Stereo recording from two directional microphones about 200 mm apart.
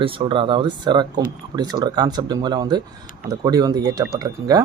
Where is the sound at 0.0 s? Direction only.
25° right (ahead or behind).